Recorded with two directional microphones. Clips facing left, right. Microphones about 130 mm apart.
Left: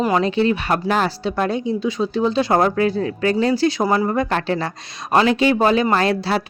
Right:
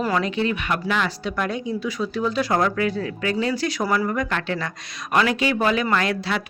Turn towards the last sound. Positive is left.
turn(degrees=35)  # may be behind; listen again after turning